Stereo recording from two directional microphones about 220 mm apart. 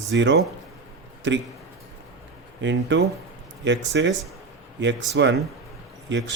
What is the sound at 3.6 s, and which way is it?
Speech, 55° right (ahead or behind).